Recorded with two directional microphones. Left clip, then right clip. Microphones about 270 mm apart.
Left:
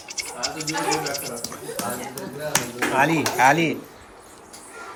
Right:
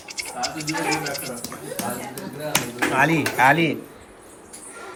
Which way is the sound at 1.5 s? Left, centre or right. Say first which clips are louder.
Right 1 dB; centre.